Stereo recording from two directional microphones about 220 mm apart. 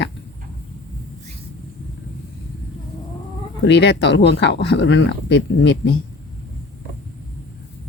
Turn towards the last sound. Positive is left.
turn(degrees=50)  # may be behind; listen again after turning